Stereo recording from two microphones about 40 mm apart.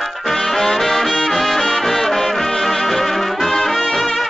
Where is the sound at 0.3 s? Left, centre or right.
Centre.